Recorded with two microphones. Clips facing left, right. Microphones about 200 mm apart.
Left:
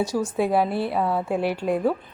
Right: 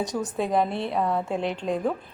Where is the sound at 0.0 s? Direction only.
20° right (ahead or behind).